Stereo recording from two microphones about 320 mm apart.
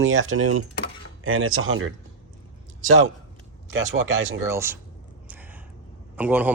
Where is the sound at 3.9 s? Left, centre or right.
Right.